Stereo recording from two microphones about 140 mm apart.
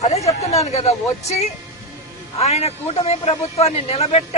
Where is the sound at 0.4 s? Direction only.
50° left (ahead or behind).